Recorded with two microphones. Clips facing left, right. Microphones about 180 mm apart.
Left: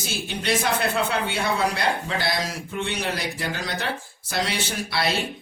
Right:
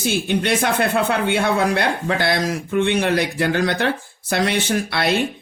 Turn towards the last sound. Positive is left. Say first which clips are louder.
# right 7 dB
turn(degrees=-60)  # may be behind; listen again after turning